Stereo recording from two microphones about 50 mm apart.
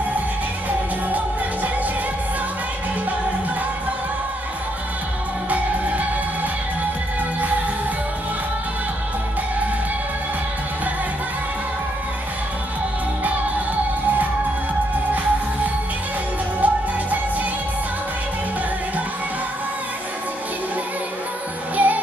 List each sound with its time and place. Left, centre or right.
0.7 s music: right
5.5 s music: right
16.6 s music: right
21.7 s music: right